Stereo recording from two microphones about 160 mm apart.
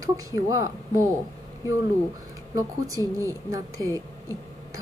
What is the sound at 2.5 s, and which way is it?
A woman's voice, 20° right (ahead or behind).